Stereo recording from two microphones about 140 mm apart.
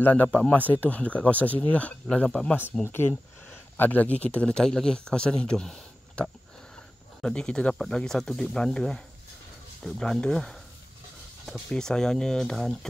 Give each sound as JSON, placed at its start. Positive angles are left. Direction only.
{"t": 0.0, "sound": "speech", "side_deg": 10}